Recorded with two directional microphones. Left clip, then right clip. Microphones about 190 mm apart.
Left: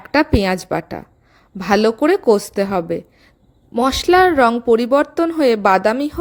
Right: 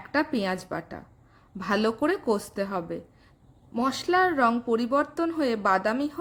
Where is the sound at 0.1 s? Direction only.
40° left (ahead or behind).